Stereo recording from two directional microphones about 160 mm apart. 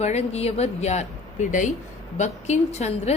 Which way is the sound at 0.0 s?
45° left (ahead or behind).